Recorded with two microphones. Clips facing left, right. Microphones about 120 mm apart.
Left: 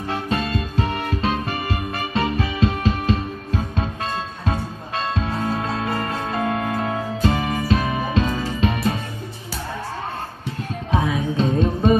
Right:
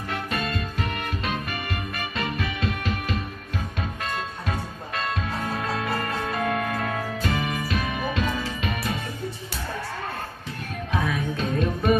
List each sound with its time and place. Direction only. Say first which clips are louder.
0.1 s music: left 5 dB; 30° left (ahead or behind)
7.3 s music: left 6 dB; 35° left (ahead or behind)
11.0 s music: left 5 dB; 25° left (ahead or behind)